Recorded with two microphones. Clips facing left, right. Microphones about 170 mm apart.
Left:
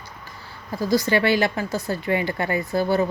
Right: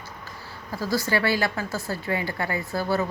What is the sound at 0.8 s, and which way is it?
Speech, 20° left (ahead or behind).